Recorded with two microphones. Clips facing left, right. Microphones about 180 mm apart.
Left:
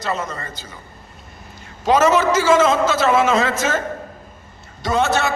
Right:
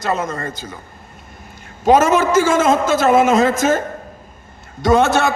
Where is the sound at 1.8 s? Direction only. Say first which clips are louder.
Right 2 dB; 50° right (ahead or behind).